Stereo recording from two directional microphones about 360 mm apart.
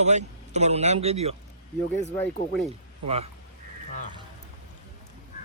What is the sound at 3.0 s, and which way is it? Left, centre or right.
Speech, centre.